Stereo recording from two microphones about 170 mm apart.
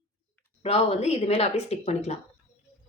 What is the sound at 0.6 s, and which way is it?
Speech, 35° left (ahead or behind).